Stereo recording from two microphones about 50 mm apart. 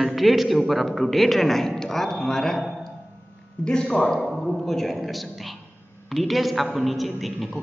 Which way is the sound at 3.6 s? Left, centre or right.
Centre.